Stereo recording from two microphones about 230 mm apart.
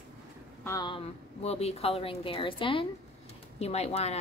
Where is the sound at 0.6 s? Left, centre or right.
Centre.